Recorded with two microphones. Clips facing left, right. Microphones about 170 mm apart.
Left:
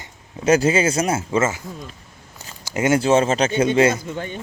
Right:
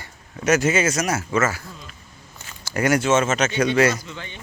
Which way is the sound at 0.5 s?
30° left (ahead or behind).